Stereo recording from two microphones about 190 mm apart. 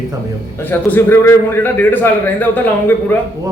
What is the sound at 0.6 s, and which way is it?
A man's voice, 10° left (ahead or behind).